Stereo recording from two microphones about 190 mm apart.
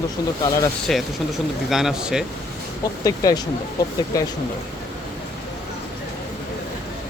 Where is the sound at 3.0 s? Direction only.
20° left (ahead or behind).